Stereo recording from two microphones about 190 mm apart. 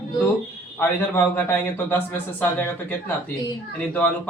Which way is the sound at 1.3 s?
10° left (ahead or behind).